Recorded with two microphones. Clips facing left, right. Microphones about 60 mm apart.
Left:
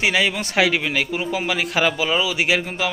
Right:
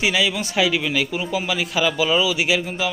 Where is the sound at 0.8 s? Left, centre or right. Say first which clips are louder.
Even; left.